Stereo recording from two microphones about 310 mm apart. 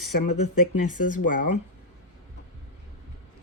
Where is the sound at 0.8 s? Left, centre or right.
Left.